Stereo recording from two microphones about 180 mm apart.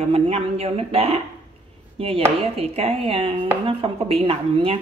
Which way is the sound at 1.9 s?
30° right (ahead or behind).